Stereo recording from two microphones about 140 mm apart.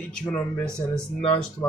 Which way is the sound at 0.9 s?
35° left (ahead or behind).